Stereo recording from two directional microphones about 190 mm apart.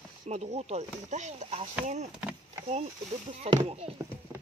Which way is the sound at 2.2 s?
5° right (ahead or behind).